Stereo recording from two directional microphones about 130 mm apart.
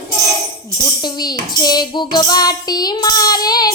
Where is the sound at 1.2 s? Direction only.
30° left (ahead or behind).